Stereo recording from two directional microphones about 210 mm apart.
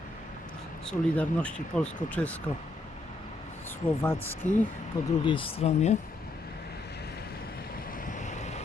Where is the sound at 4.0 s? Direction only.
10° left (ahead or behind).